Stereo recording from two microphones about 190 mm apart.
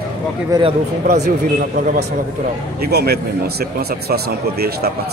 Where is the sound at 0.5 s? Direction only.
25° right (ahead or behind).